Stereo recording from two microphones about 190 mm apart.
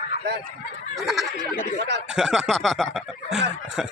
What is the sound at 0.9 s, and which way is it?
Speech, centre (ahead or behind).